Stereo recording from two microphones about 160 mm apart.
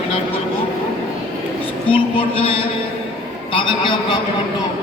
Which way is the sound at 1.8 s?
35° left (ahead or behind).